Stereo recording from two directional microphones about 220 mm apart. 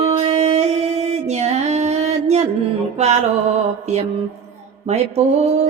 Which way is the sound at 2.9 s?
30° right (ahead or behind).